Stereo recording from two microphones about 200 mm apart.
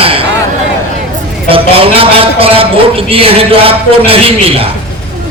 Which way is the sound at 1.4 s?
30° right (ahead or behind).